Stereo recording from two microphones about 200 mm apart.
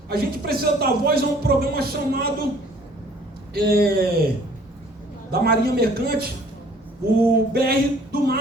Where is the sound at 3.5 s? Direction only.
50° right (ahead or behind).